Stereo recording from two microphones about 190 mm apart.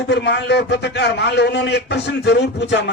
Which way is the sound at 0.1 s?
65° left (ahead or behind).